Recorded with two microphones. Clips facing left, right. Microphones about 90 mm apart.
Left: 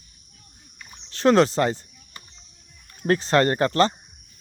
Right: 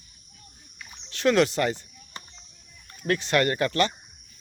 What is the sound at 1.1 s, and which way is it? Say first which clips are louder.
Speech: left 4 dB; 35° left (ahead or behind).